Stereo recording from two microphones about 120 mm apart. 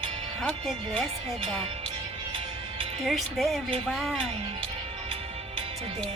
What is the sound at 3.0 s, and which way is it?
Speech, centre (ahead or behind).